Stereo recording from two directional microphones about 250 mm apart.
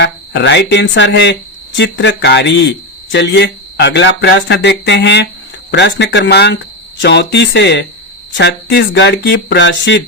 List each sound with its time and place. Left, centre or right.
0.0 s speech: left